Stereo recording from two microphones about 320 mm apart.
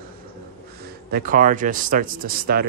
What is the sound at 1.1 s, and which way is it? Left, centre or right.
Speech, right.